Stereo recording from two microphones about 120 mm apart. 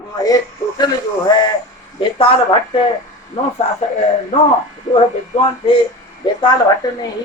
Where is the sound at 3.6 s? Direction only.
60° left (ahead or behind).